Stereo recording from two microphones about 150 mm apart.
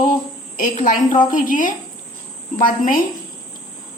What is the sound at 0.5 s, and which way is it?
A woman's voice, 60° left (ahead or behind).